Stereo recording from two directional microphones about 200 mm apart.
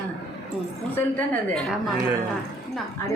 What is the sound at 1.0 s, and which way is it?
A woman's voice, 5° left (ahead or behind).